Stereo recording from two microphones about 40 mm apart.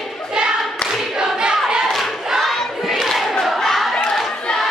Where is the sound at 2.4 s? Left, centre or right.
Centre.